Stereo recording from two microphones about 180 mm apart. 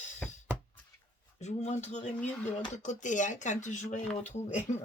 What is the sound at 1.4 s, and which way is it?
Speech, 40° left (ahead or behind).